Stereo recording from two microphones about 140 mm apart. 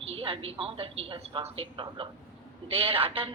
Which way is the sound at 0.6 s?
45° right (ahead or behind).